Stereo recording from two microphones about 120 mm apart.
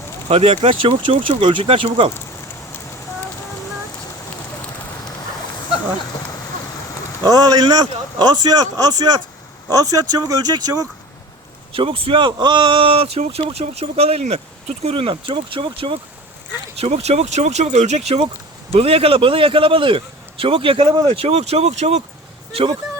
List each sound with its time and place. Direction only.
0.3 s speech: 60° right (ahead or behind)
7.2 s a man's voice: 30° right (ahead or behind)
11.7 s speech: 50° right (ahead or behind)
16.7 s speech: 60° right (ahead or behind)